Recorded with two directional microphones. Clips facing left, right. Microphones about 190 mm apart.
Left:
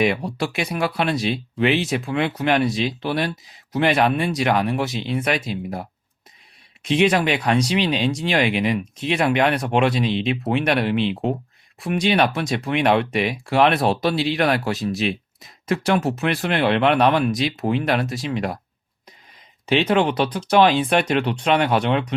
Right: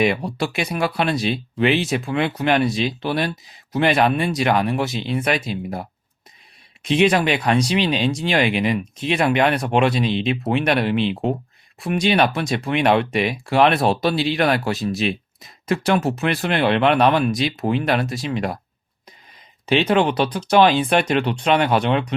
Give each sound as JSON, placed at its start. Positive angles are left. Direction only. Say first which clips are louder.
{"t": 0.0, "sound": "speech", "louder": "right 1 dB", "side_deg": -30}
{"t": 19.6, "sound": "speech", "louder": "right 1 dB", "side_deg": -30}